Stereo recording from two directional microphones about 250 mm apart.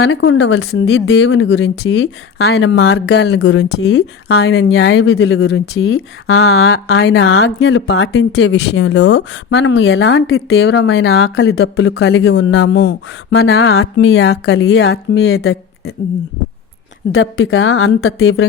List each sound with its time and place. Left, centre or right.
0.0 s speech: left
17.1 s speech: left